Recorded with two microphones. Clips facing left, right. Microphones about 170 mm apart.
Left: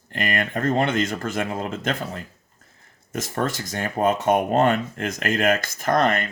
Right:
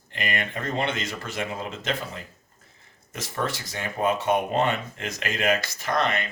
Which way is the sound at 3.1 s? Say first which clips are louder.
Left 4 dB; 45° left (ahead or behind).